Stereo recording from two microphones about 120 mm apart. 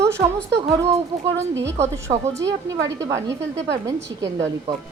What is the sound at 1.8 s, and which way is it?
A woman's voice, 25° right (ahead or behind).